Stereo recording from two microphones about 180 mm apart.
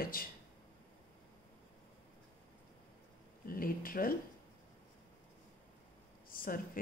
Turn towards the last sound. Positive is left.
turn(degrees=50)  # may be behind; listen again after turning